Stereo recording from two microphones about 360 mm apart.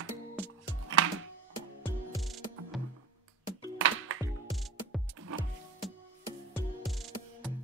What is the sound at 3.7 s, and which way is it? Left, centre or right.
Music, right.